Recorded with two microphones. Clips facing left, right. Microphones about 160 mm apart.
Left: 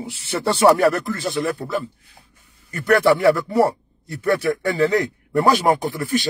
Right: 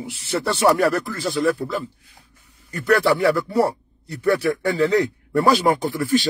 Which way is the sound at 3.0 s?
20° left (ahead or behind).